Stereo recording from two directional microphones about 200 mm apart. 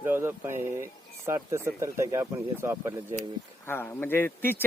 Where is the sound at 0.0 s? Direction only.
10° right (ahead or behind).